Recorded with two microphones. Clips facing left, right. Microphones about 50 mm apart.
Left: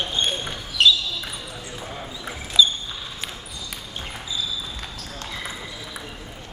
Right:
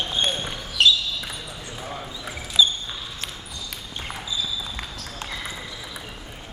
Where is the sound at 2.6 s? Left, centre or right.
Right.